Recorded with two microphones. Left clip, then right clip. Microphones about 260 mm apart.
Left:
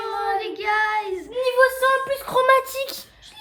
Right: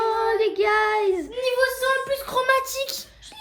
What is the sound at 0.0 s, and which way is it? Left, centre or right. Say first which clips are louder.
Child singing: right 3 dB; centre.